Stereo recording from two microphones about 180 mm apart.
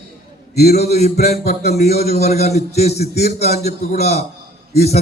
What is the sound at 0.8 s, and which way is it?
A man's voice, 35° left (ahead or behind).